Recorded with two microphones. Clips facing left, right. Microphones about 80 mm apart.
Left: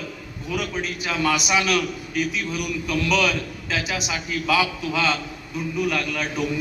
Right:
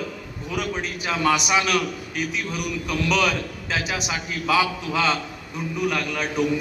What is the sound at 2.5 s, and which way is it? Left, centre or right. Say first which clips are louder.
A man's voice: left 1 dB; right.